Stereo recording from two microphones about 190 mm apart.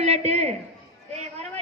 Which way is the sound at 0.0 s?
35° right (ahead or behind).